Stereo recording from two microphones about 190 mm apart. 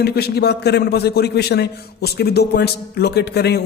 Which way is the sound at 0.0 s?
60° left (ahead or behind).